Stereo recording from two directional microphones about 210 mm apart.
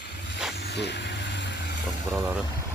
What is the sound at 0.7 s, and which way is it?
Vehicle, 55° left (ahead or behind).